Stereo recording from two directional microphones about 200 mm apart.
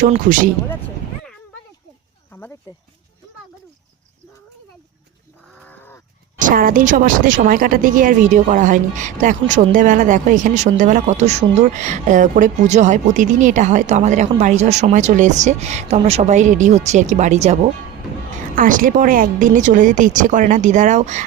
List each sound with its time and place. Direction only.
0.0 s speech: 40° right (ahead or behind)
2.3 s a sound: 15° left (ahead or behind)
5.5 s crow: 10° left (ahead or behind)
6.4 s speech: 45° right (ahead or behind)